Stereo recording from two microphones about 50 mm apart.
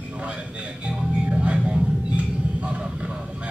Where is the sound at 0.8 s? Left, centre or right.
Right.